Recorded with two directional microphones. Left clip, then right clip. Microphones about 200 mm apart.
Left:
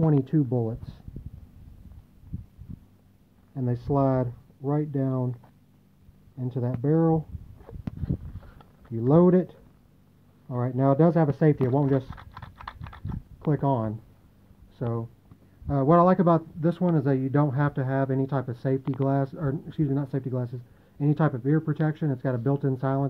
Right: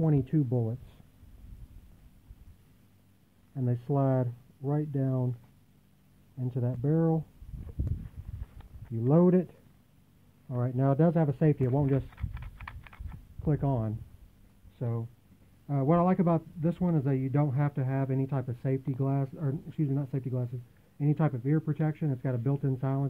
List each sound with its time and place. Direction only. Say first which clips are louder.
0.0 s speech: left 5 dB; 15° right (ahead or behind)
3.5 s a man's voice: left 5 dB; 20° right (ahead or behind)
6.3 s a man's voice: left 4 dB; 20° right (ahead or behind)
9.0 s a man's voice: left 5 dB; 20° right (ahead or behind)
12.5 s a sound: left 6 dB; centre (ahead or behind)
13.5 s a man's voice: left 6 dB; 25° right (ahead or behind)